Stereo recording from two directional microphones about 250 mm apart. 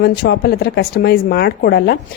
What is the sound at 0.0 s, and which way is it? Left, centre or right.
A woman's voice, left.